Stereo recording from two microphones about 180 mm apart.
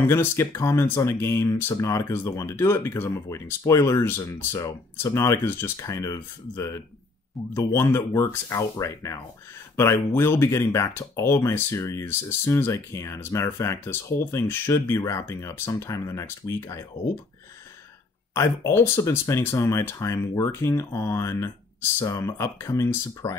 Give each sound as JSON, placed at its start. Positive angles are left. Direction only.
{"t": 0.0, "sound": "speech", "side_deg": 15}
{"t": 18.3, "sound": "speech", "side_deg": 15}